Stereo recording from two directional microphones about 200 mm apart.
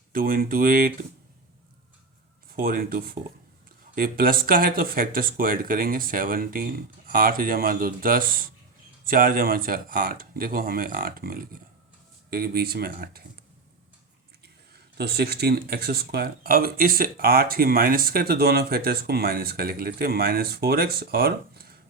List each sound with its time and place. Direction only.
0.1 s speech: 45° right (ahead or behind)
2.5 s speech: 45° right (ahead or behind)
14.9 s speech: 50° right (ahead or behind)